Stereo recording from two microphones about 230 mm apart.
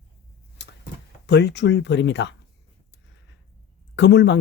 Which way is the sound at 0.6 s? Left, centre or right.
Left.